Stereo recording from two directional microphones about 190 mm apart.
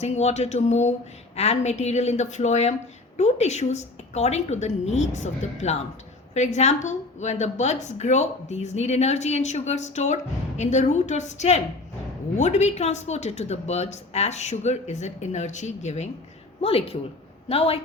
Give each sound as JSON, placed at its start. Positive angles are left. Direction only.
{"t": 0.0, "sound": "a woman's voice", "side_deg": 35}